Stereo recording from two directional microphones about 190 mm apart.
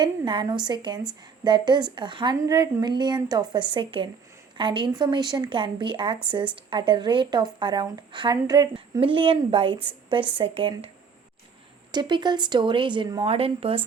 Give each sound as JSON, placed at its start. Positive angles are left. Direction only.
{"t": 0.0, "sound": "speech", "side_deg": -25}
{"t": 11.9, "sound": "speech", "side_deg": -25}